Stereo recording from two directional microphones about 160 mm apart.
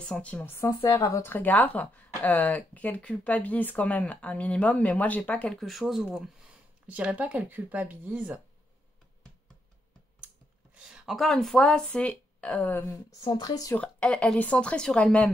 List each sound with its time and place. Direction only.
0.0 s a woman's voice: 5° left (ahead or behind); by 8.4 s 10° right (ahead or behind)
10.7 s speech: 5° right (ahead or behind); by 13.0 s 15° left (ahead or behind)
13.2 s speech: 25° left (ahead or behind)
13.7 s a woman's voice: 5° left (ahead or behind)